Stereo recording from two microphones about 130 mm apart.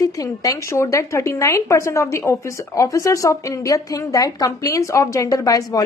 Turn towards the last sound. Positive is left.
turn(degrees=30)  # may be behind; listen again after turning